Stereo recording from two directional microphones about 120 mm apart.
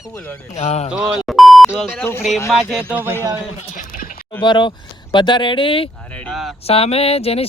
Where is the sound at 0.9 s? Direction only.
5° right (ahead or behind).